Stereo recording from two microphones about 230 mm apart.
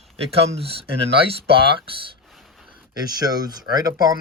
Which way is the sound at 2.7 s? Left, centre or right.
Centre.